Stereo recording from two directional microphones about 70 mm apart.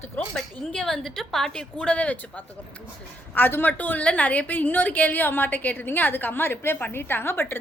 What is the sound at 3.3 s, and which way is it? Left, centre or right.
A woman's voice, left.